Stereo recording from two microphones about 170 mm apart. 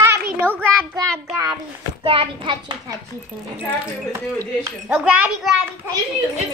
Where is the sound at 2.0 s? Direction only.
35° right (ahead or behind).